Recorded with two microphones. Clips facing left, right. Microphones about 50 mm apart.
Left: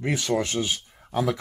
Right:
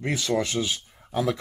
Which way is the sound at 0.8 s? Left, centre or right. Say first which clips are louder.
Left 1 dB; centre.